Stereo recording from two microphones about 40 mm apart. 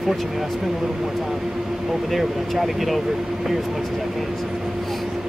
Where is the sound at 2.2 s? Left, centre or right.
Centre.